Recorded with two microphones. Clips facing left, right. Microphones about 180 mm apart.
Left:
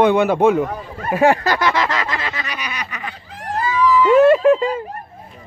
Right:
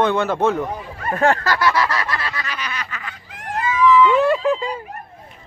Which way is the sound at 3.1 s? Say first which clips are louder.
Left 1 dB; 35° left (ahead or behind).